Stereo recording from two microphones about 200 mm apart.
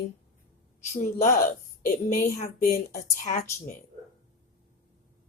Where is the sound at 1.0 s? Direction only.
40° left (ahead or behind).